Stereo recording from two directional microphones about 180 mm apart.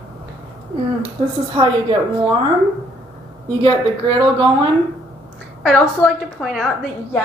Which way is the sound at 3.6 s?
25° right (ahead or behind).